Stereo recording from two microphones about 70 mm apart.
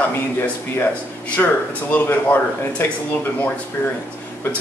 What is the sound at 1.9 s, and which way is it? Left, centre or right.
Speech, left.